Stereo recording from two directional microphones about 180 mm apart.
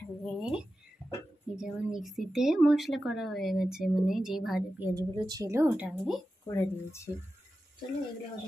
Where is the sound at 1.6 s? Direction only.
Centre (ahead or behind).